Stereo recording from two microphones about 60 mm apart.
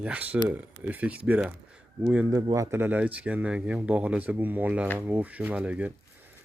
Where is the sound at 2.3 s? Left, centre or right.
Right.